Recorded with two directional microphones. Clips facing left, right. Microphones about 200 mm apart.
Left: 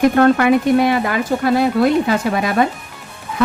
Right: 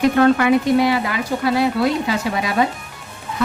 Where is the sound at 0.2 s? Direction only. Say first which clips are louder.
Left 2 dB; 50° left (ahead or behind).